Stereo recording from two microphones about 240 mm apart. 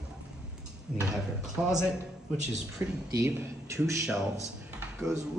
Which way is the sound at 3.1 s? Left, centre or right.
Centre.